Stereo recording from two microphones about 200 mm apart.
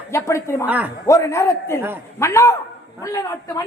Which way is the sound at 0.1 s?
15° left (ahead or behind).